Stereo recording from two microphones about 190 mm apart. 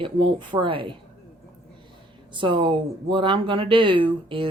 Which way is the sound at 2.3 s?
25° right (ahead or behind).